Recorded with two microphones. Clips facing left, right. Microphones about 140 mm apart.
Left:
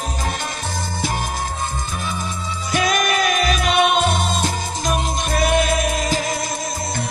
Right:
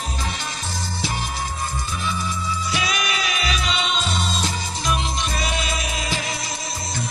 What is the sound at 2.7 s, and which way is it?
Music, 50° left (ahead or behind).